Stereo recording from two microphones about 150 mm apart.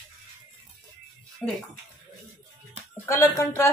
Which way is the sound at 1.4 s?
Centre (ahead or behind).